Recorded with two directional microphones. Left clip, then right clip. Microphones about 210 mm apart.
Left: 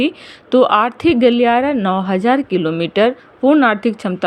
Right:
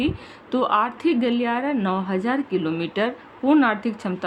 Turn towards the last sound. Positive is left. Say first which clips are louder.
# left 9 dB
turn(degrees=30)  # may be behind; listen again after turning